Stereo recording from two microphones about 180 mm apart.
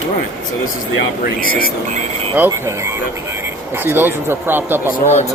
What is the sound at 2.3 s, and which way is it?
Speech, 15° right (ahead or behind).